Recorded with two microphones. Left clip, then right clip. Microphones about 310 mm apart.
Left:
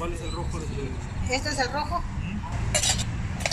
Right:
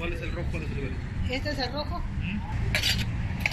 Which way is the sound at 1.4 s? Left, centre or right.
Left.